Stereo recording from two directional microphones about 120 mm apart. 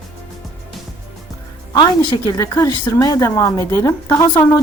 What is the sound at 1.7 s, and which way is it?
A woman's voice, 40° left (ahead or behind).